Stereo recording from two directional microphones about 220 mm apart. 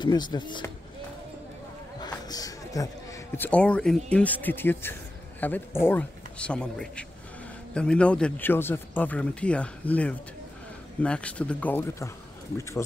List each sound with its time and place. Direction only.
0.0 s speech: 20° left (ahead or behind)
2.0 s a sound: 20° left (ahead or behind)
3.3 s speech: 5° left (ahead or behind)